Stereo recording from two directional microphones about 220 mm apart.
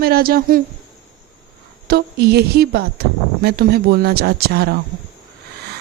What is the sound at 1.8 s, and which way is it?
Speech, 45° right (ahead or behind).